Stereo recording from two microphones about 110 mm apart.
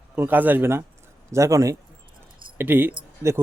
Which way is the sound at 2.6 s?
20° right (ahead or behind).